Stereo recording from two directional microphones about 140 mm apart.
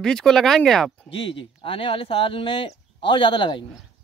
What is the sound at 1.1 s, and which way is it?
Speech, 40° left (ahead or behind).